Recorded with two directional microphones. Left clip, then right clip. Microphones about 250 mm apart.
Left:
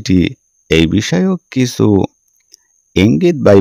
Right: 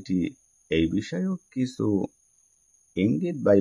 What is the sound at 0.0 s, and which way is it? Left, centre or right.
Speech, left.